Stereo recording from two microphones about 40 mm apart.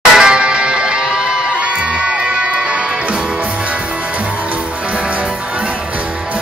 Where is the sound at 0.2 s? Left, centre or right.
Right.